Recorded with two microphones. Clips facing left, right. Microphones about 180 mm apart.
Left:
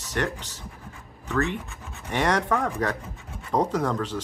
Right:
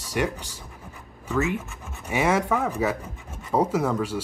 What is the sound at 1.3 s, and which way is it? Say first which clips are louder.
Speech: right 1 dB; 5° right (ahead or behind).